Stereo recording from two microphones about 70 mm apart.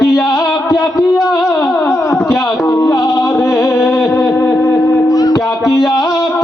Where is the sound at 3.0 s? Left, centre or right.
Left.